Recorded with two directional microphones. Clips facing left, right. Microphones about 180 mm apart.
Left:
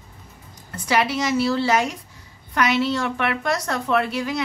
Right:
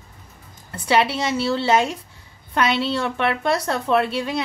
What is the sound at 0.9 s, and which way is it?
A woman's voice, 30° right (ahead or behind).